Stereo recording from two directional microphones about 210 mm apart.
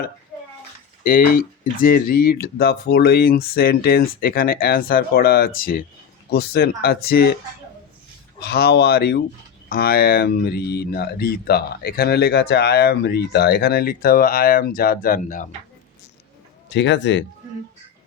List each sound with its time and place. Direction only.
1.0 s speech: 45° left (ahead or behind)
8.4 s speech: 50° left (ahead or behind)
16.6 s a man's voice: 60° left (ahead or behind)